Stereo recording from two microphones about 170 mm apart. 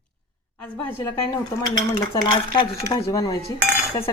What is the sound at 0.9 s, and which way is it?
Speech, 15° left (ahead or behind).